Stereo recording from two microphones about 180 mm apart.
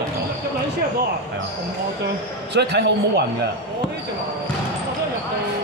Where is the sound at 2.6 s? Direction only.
70° right (ahead or behind).